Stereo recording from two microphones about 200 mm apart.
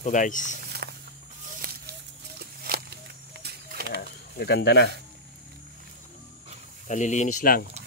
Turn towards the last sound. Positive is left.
turn(degrees=45)  # may be behind; listen again after turning